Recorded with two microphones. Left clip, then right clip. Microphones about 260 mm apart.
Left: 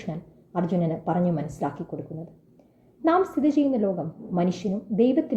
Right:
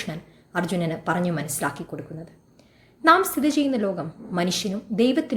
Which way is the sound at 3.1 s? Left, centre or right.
Right.